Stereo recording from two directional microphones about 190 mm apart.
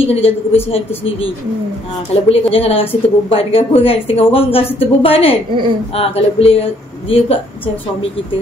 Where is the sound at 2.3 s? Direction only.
30° left (ahead or behind).